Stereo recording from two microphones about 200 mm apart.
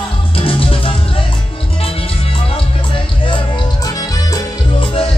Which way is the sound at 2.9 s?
25° left (ahead or behind).